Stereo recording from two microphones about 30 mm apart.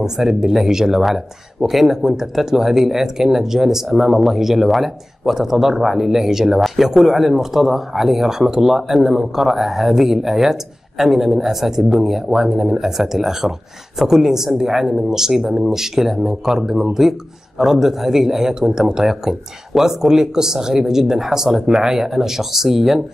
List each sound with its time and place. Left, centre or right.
0.2 s speech: centre
1.0 s speech: centre; by 12.9 s right
12.9 s speech: centre
19.0 s speech: centre